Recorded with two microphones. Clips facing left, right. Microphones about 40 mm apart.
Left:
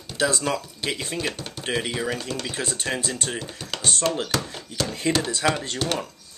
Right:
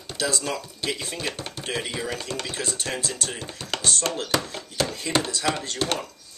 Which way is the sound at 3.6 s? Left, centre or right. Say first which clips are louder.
Right 7 dB; centre.